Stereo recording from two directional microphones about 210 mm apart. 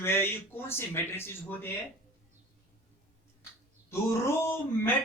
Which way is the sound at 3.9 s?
10° left (ahead or behind).